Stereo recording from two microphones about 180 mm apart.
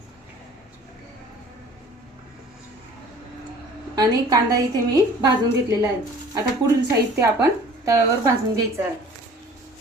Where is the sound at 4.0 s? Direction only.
20° right (ahead or behind).